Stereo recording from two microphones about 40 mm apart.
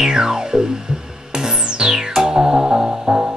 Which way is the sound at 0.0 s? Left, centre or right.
Centre.